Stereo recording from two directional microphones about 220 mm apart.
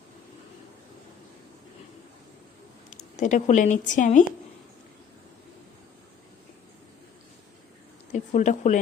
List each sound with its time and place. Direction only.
3.2 s a woman's voice: 35° left (ahead or behind)
8.1 s a woman's voice: 35° left (ahead or behind)